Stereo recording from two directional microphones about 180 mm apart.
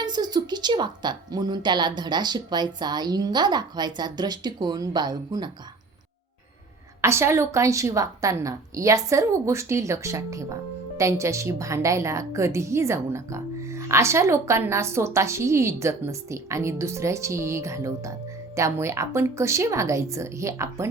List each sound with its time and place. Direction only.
0.0 s a woman's voice: 25° right (ahead or behind)
7.0 s a woman's voice: 15° right (ahead or behind)